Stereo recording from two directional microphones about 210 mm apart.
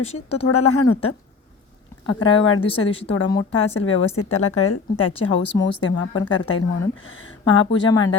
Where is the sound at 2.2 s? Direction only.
25° left (ahead or behind).